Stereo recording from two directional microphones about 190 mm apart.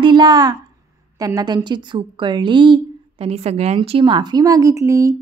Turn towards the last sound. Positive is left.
turn(degrees=-15)  # may be behind; listen again after turning